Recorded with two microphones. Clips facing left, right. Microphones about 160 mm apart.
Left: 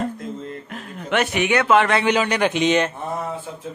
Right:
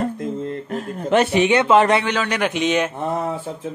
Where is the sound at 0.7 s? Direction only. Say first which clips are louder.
Right 6 dB; 40° right (ahead or behind).